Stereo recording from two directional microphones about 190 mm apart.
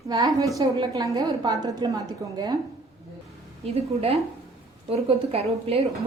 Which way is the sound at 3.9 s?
30° right (ahead or behind).